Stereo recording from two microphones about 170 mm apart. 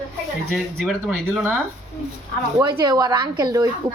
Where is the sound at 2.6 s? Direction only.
25° right (ahead or behind).